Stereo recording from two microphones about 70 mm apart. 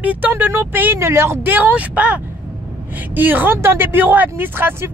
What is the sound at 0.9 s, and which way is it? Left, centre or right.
Speech, right.